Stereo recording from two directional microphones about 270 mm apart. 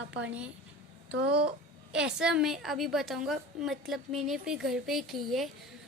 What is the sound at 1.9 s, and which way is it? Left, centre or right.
A woman's voice, centre.